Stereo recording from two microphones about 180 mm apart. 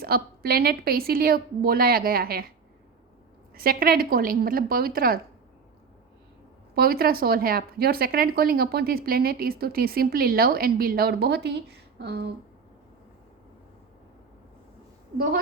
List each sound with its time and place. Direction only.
0.0 s speech: 55° right (ahead or behind)
3.5 s speech: 55° right (ahead or behind)
6.7 s speech: 55° right (ahead or behind)